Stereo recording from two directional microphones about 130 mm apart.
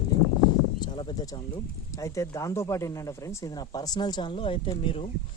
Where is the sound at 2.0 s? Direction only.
25° left (ahead or behind); by 5.1 s 45° left (ahead or behind).